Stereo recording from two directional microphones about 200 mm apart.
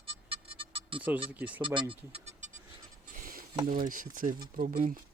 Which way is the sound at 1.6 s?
25° right (ahead or behind).